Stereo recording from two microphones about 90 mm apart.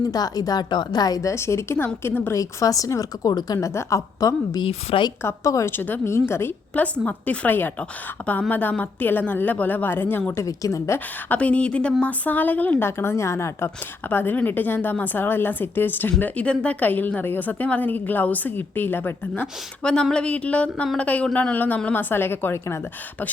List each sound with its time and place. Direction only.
0.1 s a woman's voice: 45° left (ahead or behind); by 2.3 s 25° left (ahead or behind)
2.3 s speech: 40° left (ahead or behind)
5.7 s a woman's voice: 25° left (ahead or behind)
7.0 s a woman's voice: 15° left (ahead or behind)
10.4 s speech: 40° left (ahead or behind)
11.3 s a woman's voice: 15° left (ahead or behind)
13.0 s speech: 30° left (ahead or behind)
14.1 s a woman's voice: 20° left (ahead or behind)
19.8 s a woman's voice: 10° left (ahead or behind); by 22.8 s 25° left (ahead or behind)